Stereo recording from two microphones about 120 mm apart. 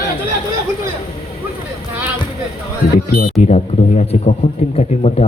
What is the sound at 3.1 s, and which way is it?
A man's voice, 80° left.